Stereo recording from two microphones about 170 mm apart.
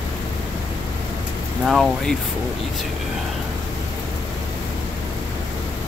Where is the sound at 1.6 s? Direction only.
Centre (ahead or behind).